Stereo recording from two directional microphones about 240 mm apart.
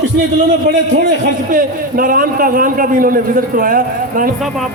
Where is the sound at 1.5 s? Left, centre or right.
Right.